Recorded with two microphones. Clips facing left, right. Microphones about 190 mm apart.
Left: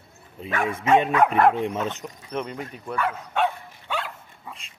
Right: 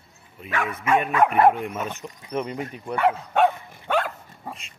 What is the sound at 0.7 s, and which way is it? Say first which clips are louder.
Speech: left 4 dB; 30° left (ahead or behind).